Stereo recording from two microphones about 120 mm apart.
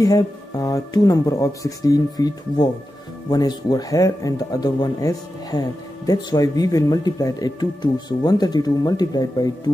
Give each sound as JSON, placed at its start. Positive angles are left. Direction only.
{"t": 0.0, "sound": "speech", "side_deg": 30}